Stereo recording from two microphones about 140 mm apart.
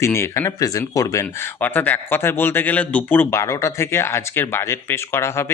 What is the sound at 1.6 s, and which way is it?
Speech, 10° left (ahead or behind).